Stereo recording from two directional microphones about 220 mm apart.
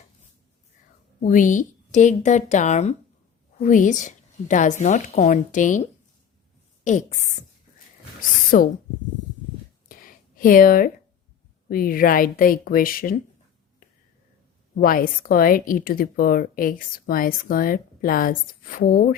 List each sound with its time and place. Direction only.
1.2 s a woman's voice: 35° left (ahead or behind)
8.4 s speech: 40° left (ahead or behind)
9.9 s a sound: 40° left (ahead or behind)
11.7 s a woman's voice: 40° left (ahead or behind)
14.8 s a woman's voice: 40° left (ahead or behind)